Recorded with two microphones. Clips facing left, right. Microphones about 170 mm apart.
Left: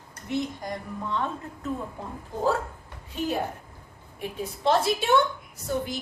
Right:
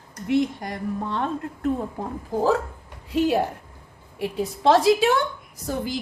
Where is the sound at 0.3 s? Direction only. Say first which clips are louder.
Right 7 dB; 70° right (ahead or behind).